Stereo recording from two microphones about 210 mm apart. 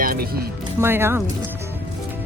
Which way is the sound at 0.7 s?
10° right (ahead or behind).